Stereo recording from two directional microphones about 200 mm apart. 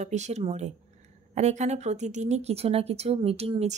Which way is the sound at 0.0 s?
35° right (ahead or behind).